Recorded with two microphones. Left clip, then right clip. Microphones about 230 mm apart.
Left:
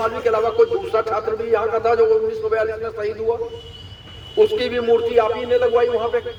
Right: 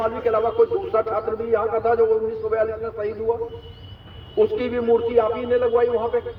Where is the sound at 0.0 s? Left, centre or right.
Left.